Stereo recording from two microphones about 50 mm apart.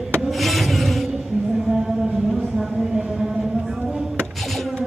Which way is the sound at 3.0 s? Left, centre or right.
Centre.